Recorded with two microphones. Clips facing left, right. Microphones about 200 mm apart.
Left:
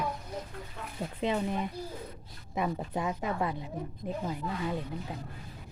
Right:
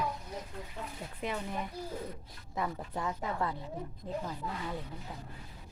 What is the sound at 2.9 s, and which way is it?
A child's voice, 15° left (ahead or behind).